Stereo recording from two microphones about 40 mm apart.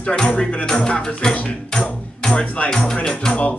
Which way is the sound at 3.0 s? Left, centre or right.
Centre.